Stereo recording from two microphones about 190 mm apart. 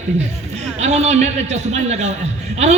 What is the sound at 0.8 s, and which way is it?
A man's voice, 35° right (ahead or behind).